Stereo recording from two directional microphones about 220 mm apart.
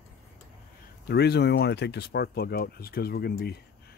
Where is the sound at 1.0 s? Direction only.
50° left (ahead or behind).